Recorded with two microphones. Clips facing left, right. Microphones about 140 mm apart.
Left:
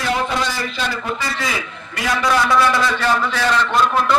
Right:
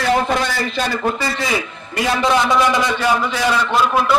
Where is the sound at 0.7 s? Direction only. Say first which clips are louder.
Right 4 dB; 45° right (ahead or behind).